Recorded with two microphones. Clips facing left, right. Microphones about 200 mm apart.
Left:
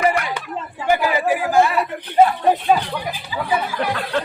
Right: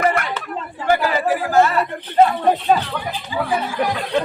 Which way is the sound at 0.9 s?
10° left (ahead or behind).